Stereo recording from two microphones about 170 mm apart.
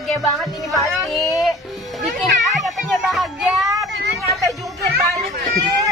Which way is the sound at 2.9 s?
Centre (ahead or behind).